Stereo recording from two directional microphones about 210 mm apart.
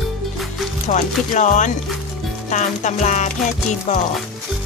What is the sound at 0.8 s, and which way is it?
Music, 35° left (ahead or behind).